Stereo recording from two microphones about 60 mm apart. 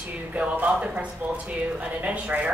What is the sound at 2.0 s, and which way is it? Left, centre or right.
Speech, right.